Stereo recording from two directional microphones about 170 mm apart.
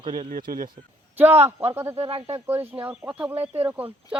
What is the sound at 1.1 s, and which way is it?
Speech, 10° right (ahead or behind).